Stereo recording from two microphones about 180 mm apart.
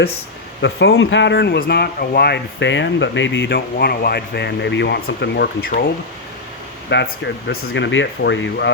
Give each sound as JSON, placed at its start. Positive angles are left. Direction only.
{"t": 0.6, "sound": "speech", "side_deg": 75}
{"t": 6.9, "sound": "speech", "side_deg": 65}